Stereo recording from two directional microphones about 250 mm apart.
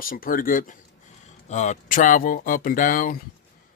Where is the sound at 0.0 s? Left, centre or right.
Left.